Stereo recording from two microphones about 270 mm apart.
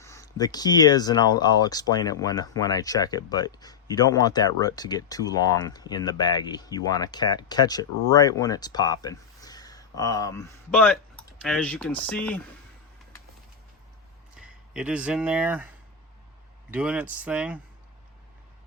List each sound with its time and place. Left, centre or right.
0.0 s speech: centre
14.3 s speech: centre
16.7 s speech: centre